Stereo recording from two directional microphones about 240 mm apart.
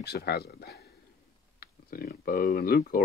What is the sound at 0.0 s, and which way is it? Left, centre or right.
Speech, left.